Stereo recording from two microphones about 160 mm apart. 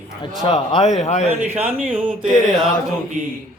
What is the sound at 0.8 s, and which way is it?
Speech, 45° left (ahead or behind).